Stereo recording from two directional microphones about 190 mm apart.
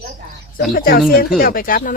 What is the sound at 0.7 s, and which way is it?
Speech, 50° left (ahead or behind).